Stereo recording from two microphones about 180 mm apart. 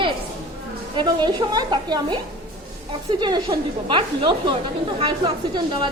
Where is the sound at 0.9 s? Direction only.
25° right (ahead or behind).